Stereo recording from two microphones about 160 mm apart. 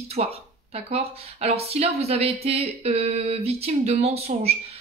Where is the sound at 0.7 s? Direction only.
40° right (ahead or behind).